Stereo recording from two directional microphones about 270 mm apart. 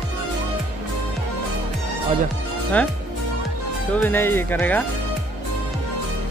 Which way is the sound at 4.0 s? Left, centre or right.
Centre.